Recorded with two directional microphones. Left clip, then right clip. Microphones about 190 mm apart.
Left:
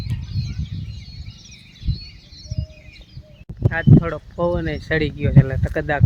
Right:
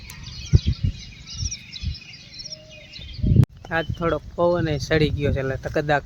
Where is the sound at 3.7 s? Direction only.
15° right (ahead or behind).